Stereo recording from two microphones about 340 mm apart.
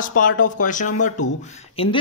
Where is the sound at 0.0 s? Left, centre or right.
Left.